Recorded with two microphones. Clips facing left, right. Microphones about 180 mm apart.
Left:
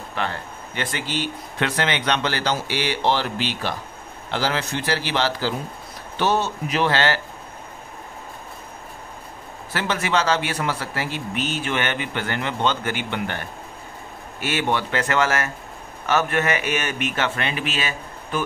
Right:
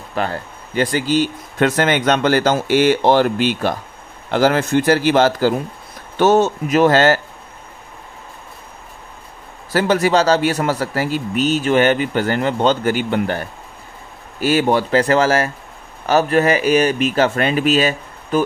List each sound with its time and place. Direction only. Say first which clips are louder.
0.1 s speech: right 6 dB; 40° right (ahead or behind)
9.7 s a man's voice: right 9 dB; 40° right (ahead or behind)